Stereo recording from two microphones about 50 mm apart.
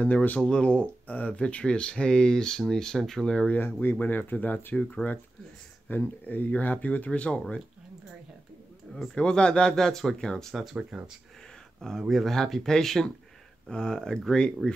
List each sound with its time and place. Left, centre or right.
0.0 s speech: left
0.4 s speech: centre
3.8 s speech: left
5.9 s speech: left; by 7.6 s centre
9.1 s speech: centre
10.5 s speech: centre
10.8 s speech: right
11.4 s a sound: centre
12.0 s speech: centre